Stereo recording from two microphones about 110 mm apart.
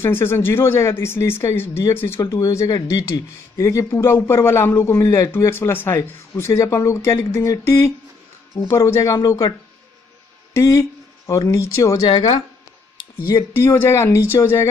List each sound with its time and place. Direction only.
0.0 s speech: 20° left (ahead or behind)
10.5 s speech: 30° left (ahead or behind)
12.1 s speech: 45° left (ahead or behind)
13.3 s speech: 25° left (ahead or behind)